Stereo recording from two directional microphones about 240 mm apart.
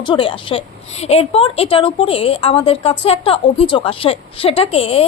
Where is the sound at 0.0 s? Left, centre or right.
Left.